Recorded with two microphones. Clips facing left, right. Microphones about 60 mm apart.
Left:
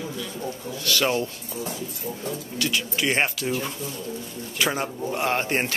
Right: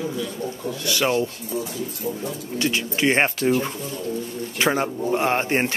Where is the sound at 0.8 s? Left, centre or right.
Right.